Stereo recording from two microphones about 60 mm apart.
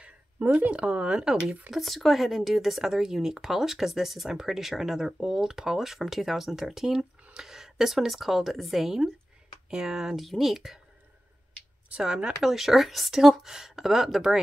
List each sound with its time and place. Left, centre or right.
0.7 s speech: centre
1.7 s speech: centre
12.2 s speech: centre
12.4 s speech: centre